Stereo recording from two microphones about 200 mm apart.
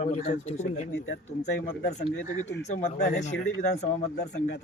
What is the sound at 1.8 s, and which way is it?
Speech, 35° left (ahead or behind).